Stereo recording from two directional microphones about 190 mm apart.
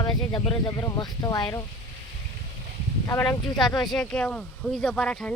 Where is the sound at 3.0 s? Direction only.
10° left (ahead or behind).